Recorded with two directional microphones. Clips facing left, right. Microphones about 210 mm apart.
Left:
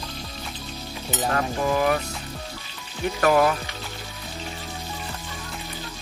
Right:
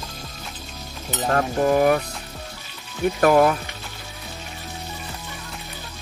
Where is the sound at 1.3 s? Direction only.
45° right (ahead or behind).